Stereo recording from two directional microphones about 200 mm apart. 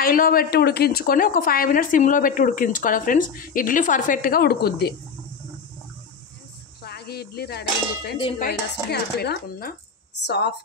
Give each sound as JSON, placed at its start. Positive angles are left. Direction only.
{"t": 0.0, "sound": "speech", "side_deg": 45}
{"t": 6.8, "sound": "clang", "side_deg": 55}
{"t": 8.4, "sound": "a woman's voice", "side_deg": 50}